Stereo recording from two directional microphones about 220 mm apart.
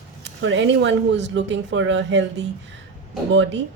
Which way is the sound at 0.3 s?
55° right (ahead or behind).